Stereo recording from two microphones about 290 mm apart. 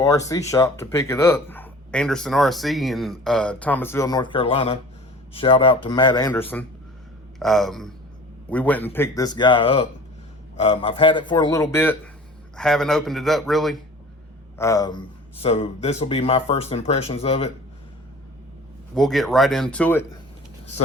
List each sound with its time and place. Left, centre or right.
0.0 s speech: centre
14.6 s speech: centre
18.9 s speech: centre